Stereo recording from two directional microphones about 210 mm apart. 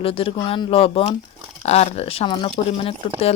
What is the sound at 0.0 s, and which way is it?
Speech, 25° left (ahead or behind).